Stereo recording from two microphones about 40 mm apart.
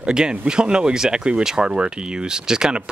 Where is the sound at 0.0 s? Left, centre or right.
Centre.